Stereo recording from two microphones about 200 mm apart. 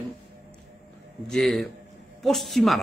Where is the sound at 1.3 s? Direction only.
Centre (ahead or behind).